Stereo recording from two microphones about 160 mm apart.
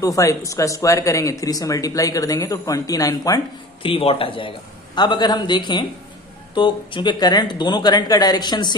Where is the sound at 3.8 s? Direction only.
35° left (ahead or behind).